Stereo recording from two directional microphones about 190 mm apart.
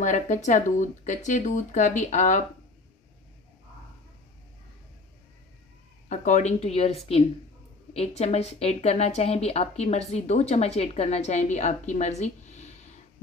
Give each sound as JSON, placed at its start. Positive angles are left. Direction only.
{"t": 0.0, "sound": "a woman's voice", "side_deg": 40}
{"t": 6.0, "sound": "a woman's voice", "side_deg": 40}